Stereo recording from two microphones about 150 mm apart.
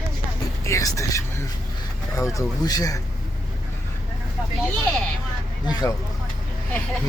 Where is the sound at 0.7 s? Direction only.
20° left (ahead or behind).